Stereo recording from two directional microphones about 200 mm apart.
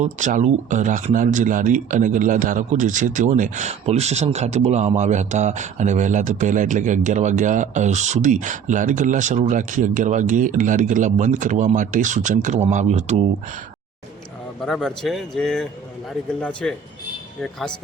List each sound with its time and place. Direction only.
0.0 s speech: 35° right (ahead or behind)
14.6 s speech: centre (ahead or behind)